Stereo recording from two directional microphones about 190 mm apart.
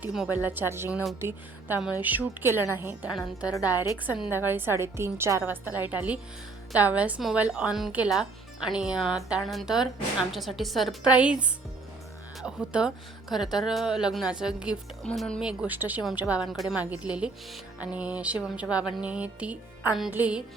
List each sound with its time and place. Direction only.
0.0 s speech: 5° right (ahead or behind)
3.4 s a woman's voice: 20° left (ahead or behind)
4.0 s a woman's voice: 10° right (ahead or behind)